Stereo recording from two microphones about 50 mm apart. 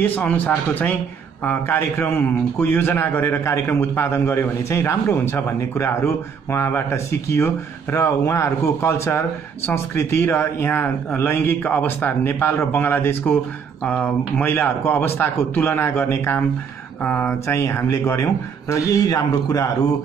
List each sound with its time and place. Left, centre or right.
0.0 s speech: left
1.4 s speech: left
3.6 s a man's voice: left
9.9 s a man's voice: left
13.8 s speech: left
17.3 s speech: left